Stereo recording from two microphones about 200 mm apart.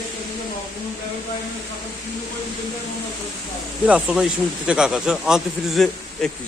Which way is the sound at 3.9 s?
5° right (ahead or behind).